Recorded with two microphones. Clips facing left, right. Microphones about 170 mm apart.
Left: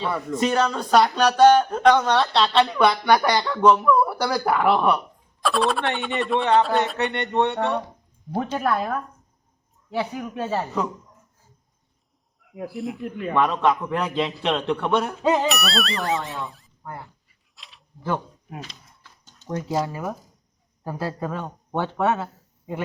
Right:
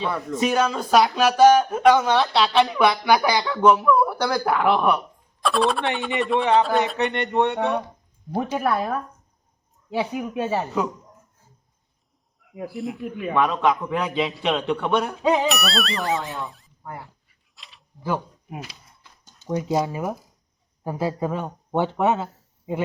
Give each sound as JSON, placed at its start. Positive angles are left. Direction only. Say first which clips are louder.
{"t": 0.1, "sound": "a man's voice", "louder": "left 1 dB", "side_deg": 0}
{"t": 6.9, "sound": "music", "louder": "right 1 dB", "side_deg": -15}
{"t": 12.4, "sound": "a man's voice", "louder": "even", "side_deg": 0}
{"t": 17.5, "sound": "a sound", "louder": "left 1 dB", "side_deg": 0}
{"t": 20.8, "sound": "speech", "louder": "right 3 dB", "side_deg": -15}